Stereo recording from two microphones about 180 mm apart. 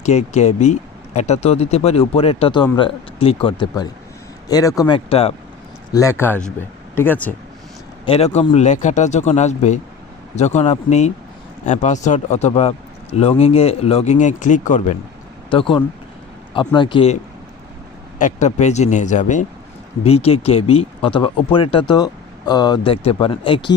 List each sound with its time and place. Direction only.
0.0 s speech: 40° left (ahead or behind)
5.9 s speech: 15° left (ahead or behind)
8.0 s speech: 35° left (ahead or behind)
15.4 s speech: 30° left (ahead or behind)
18.2 s speech: 45° left (ahead or behind)
20.1 s speech: 35° left (ahead or behind)